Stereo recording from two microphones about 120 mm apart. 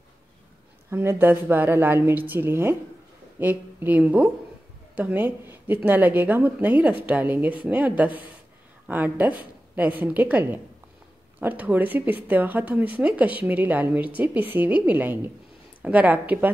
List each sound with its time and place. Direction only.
0.8 s a woman's voice: 20° right (ahead or behind)